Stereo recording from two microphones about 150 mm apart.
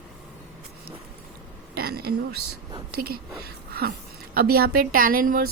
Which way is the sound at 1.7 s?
90° right.